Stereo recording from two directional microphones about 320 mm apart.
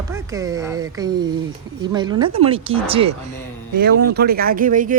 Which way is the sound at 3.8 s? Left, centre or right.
Right.